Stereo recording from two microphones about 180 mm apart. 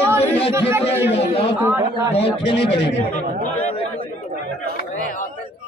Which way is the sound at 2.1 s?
35° left (ahead or behind).